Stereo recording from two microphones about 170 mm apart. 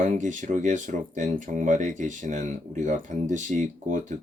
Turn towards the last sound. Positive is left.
turn(degrees=-50)  # may be behind; listen again after turning